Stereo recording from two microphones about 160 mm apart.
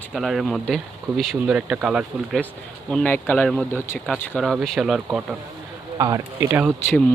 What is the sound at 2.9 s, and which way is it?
Speech, 10° left (ahead or behind).